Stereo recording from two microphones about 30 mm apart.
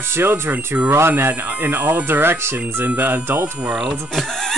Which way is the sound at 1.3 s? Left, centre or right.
Right.